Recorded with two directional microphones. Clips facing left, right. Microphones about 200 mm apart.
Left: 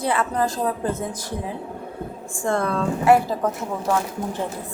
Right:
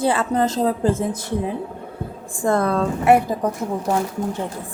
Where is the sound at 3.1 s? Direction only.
20° right (ahead or behind).